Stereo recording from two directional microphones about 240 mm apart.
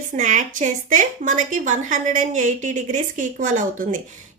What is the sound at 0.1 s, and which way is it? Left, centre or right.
A woman's voice, right.